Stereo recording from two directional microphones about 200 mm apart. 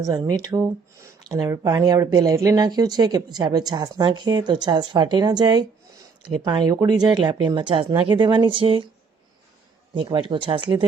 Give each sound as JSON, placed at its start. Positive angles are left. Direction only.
{"t": 0.0, "sound": "speech", "side_deg": -20}
{"t": 9.9, "sound": "speech", "side_deg": -25}